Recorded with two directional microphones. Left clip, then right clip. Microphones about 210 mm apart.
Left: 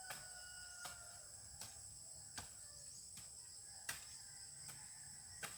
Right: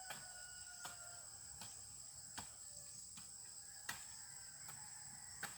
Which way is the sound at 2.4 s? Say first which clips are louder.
Right 1 dB; 15° left (ahead or behind).